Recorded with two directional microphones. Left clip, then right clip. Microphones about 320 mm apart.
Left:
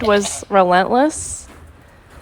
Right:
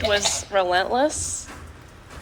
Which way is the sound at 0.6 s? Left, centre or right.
Centre.